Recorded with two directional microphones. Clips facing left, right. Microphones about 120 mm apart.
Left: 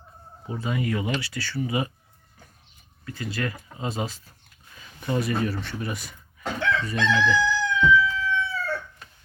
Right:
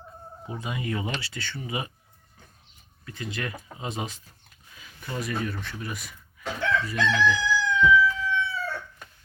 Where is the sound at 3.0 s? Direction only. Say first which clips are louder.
Left 4 dB; 20° right (ahead or behind).